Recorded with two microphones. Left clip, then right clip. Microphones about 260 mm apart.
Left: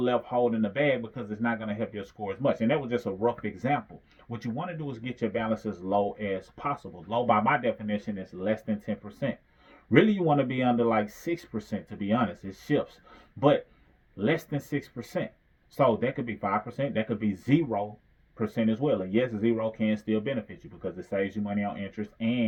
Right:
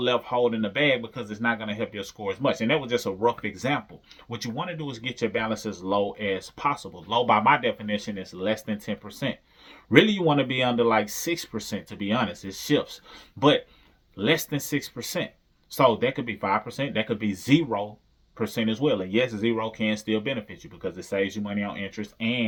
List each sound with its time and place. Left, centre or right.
0.0 s speech: centre
14.2 s speech: centre